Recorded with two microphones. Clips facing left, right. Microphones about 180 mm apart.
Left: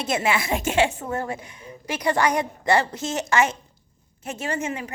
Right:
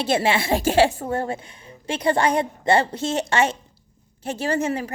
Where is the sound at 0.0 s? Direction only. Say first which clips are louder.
Right 3 dB; 30° right (ahead or behind).